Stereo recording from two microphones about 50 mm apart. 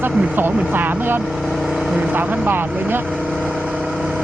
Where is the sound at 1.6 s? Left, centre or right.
Centre.